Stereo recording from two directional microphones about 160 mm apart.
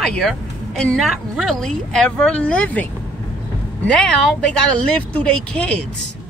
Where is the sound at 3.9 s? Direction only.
5° left (ahead or behind).